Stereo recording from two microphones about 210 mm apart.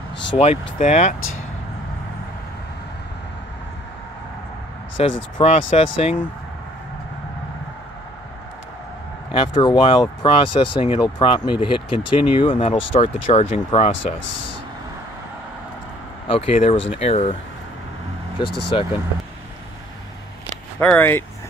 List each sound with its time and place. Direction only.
0.4 s speech: 30° left (ahead or behind)
5.0 s speech: 30° left (ahead or behind)
9.3 s speech: 25° left (ahead or behind)
16.3 s speech: 25° left (ahead or behind)
18.4 s speech: 25° left (ahead or behind)
20.8 s speech: 10° left (ahead or behind)